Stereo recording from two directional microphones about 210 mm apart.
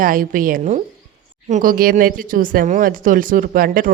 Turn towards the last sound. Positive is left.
turn(degrees=-40)  # may be behind; listen again after turning